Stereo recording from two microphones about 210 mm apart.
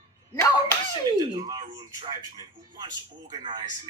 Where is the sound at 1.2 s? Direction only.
20° right (ahead or behind).